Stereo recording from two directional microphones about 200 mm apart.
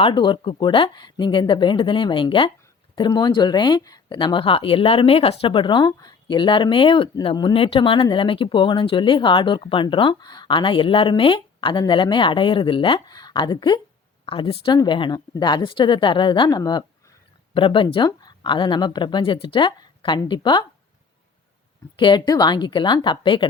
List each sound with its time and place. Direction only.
0.0 s speech: 25° left (ahead or behind)
21.9 s speech: 20° left (ahead or behind)